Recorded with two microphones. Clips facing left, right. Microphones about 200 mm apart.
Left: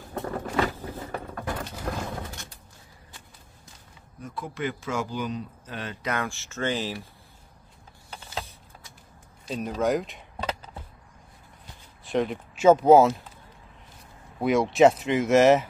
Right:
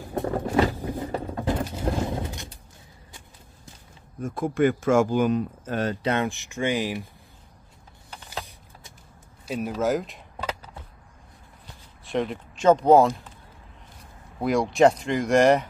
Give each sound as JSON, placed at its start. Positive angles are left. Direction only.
{"t": 0.1, "sound": "vehicle", "side_deg": -15}
{"t": 1.1, "sound": "a sound", "side_deg": -25}
{"t": 4.2, "sound": "speech", "side_deg": -50}
{"t": 6.0, "sound": "speech", "side_deg": -20}
{"t": 9.5, "sound": "speech", "side_deg": -5}
{"t": 12.0, "sound": "speech", "side_deg": 0}
{"t": 14.4, "sound": "speech", "side_deg": 0}